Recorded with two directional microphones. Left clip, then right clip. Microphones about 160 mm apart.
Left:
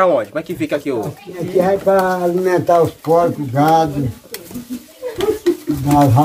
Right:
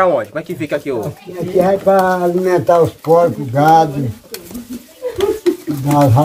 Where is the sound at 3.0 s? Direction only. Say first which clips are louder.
Right 3 dB; 10° right (ahead or behind).